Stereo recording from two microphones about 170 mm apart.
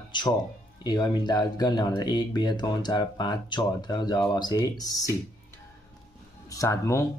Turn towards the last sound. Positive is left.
turn(degrees=20)  # may be behind; listen again after turning